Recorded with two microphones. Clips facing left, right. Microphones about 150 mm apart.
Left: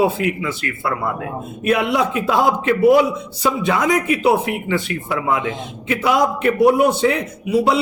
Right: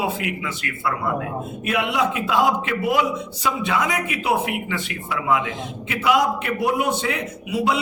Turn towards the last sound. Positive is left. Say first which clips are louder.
# left 5 dB
turn(degrees=35)  # may be behind; listen again after turning